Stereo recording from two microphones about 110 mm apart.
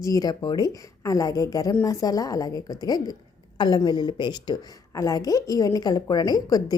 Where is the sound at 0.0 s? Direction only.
35° left (ahead or behind).